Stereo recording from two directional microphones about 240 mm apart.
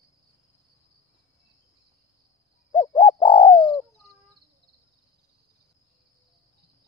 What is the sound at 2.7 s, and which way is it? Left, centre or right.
Bird, centre.